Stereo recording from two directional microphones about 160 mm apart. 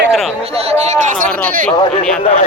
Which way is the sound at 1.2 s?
10° left (ahead or behind).